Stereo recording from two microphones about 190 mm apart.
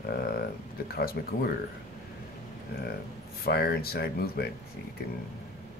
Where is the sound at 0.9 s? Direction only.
55° left (ahead or behind).